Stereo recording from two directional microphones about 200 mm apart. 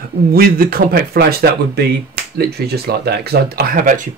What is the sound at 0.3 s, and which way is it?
Speech, 45° right (ahead or behind).